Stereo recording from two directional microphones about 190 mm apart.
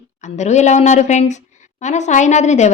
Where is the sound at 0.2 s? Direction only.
40° left (ahead or behind).